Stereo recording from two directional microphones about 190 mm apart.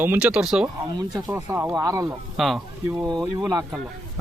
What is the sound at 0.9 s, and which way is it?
Speech, 20° right (ahead or behind).